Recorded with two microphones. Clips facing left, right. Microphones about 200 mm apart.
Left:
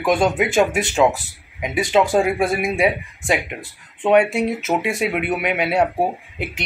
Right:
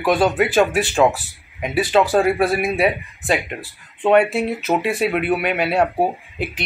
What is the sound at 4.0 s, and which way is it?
Speech, 15° left (ahead or behind).